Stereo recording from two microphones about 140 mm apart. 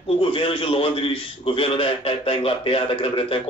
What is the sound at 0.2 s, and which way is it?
A man's voice, 40° left (ahead or behind).